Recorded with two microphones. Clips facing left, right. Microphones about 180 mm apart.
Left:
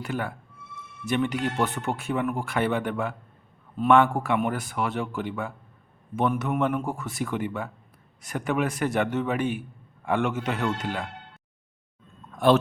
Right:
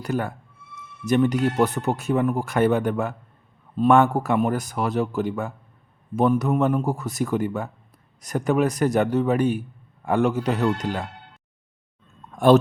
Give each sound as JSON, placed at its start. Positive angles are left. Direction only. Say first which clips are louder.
{"t": 0.0, "sound": "speech", "louder": "right 4 dB", "side_deg": -40}